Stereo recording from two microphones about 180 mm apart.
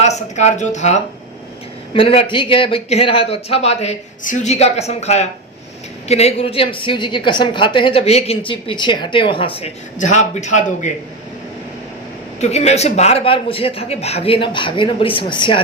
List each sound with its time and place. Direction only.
0.0 s a woman's voice: 40° left (ahead or behind)
12.4 s speech: 35° left (ahead or behind)